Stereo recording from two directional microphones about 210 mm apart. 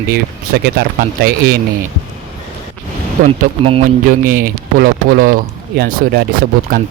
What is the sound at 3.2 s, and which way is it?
Speech, 35° right (ahead or behind).